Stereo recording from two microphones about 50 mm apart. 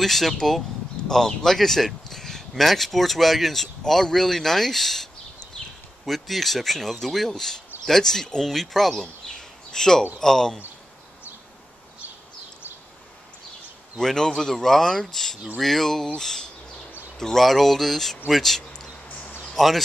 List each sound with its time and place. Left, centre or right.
0.0 s speech: centre
13.9 s speech: centre